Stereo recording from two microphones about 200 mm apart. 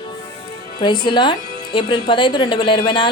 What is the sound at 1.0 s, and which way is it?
Speech, 25° left (ahead or behind).